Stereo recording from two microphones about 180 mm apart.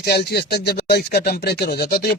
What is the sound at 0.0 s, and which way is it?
A man's voice, 65° left (ahead or behind).